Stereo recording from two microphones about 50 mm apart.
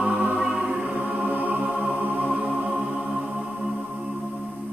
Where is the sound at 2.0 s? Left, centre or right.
Right.